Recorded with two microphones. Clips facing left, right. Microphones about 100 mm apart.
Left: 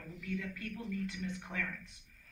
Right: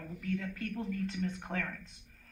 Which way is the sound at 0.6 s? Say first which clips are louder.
Right 3 dB; 55° right (ahead or behind).